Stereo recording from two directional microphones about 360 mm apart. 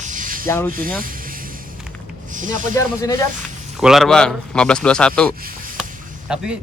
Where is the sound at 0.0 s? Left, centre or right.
Right.